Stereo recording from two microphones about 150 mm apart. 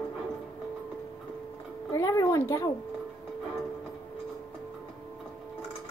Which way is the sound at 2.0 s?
20° left (ahead or behind).